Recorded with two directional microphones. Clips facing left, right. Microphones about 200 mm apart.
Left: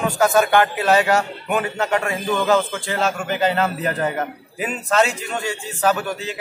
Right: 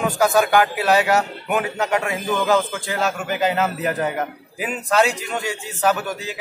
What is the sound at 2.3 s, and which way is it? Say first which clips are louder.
A man's voice: left 1 dB; centre (ahead or behind).